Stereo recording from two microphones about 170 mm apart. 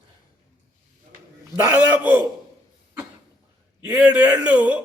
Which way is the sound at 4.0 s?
5° right (ahead or behind).